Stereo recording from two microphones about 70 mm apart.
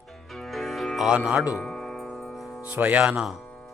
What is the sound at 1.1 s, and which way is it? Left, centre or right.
Speech, centre.